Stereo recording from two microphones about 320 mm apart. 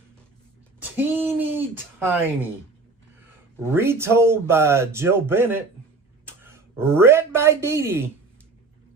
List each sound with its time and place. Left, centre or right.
0.8 s speech: centre
3.6 s speech: centre